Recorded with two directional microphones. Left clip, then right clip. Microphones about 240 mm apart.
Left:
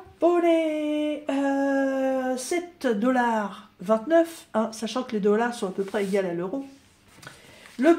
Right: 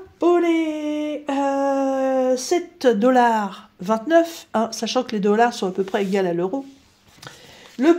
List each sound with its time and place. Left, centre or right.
0.2 s speech: right